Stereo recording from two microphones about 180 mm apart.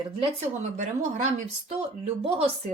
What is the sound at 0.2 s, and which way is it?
Speech, 40° right (ahead or behind).